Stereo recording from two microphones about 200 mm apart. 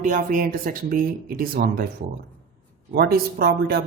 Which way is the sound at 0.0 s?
40° right (ahead or behind).